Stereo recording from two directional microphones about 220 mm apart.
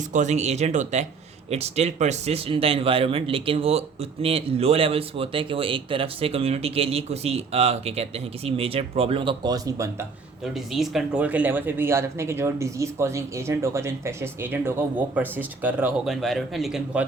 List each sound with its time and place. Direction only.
0.1 s speech: 35° right (ahead or behind); by 10.1 s 15° right (ahead or behind)
10.4 s speech: centre (ahead or behind)